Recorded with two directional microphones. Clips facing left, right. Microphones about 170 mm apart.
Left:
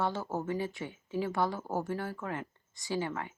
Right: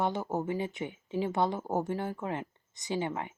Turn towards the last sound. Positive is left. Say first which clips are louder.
# right 1 dB
turn(degrees=-20)  # may be behind; listen again after turning